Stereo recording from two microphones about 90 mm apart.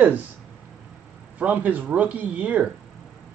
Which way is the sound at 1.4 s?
15° right (ahead or behind).